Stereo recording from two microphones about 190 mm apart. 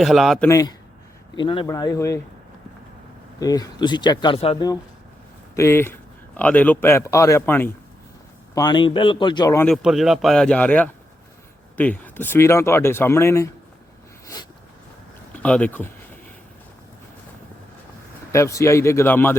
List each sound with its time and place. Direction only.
0.0 s speech: centre (ahead or behind)
0.4 s a man's voice: 15° left (ahead or behind)
3.4 s speech: 20° left (ahead or behind)
5.5 s a man's voice: 15° left (ahead or behind)
8.5 s speech: 20° left (ahead or behind)
9.6 s a man's voice: centre (ahead or behind); by 13.5 s 15° left (ahead or behind)
15.3 s speech: 5° left (ahead or behind)
18.3 s a man's voice: 15° left (ahead or behind)